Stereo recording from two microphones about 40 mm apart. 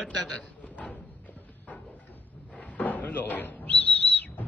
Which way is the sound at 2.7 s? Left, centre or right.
Left.